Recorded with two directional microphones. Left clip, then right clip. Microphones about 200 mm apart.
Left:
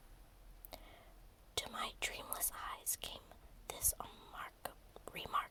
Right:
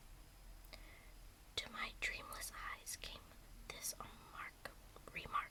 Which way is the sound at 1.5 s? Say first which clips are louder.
Left 3 dB; 30° left (ahead or behind).